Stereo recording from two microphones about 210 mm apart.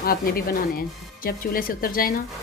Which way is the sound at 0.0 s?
45° left (ahead or behind).